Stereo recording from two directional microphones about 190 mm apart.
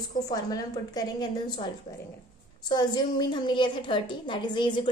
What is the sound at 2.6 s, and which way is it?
A woman's voice, 20° left (ahead or behind).